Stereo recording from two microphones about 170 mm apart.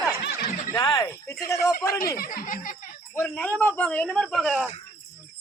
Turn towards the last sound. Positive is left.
turn(degrees=5)  # may be behind; listen again after turning